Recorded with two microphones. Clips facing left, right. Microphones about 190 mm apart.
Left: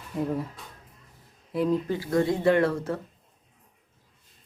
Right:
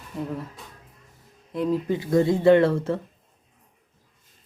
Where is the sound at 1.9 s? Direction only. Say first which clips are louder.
Right 4 dB; 20° right (ahead or behind).